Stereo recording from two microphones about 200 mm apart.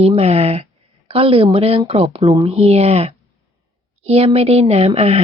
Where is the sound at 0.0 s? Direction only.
30° right (ahead or behind).